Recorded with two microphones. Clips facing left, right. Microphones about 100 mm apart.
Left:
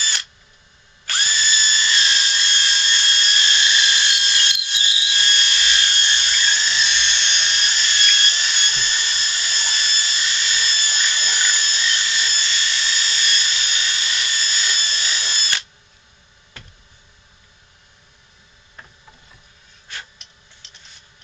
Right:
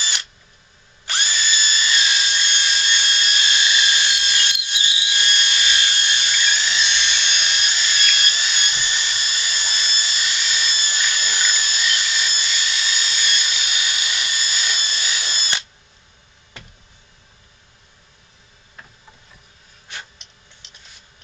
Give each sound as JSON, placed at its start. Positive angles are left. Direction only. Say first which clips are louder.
{"t": 1.0, "sound": "drill", "louder": "even", "side_deg": -15}
{"t": 6.5, "sound": "dental drill", "louder": "even", "side_deg": -15}
{"t": 11.5, "sound": "a sound", "louder": "even", "side_deg": -10}
{"t": 19.9, "sound": "tick-tock", "louder": "even", "side_deg": -20}